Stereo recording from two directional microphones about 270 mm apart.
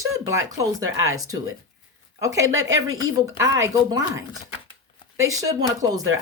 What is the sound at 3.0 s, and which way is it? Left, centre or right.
Speech, centre.